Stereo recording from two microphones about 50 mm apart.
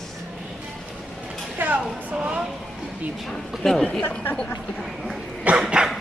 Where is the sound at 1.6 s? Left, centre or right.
Right.